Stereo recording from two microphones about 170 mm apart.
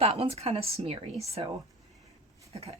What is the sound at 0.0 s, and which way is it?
Speech, 35° right (ahead or behind).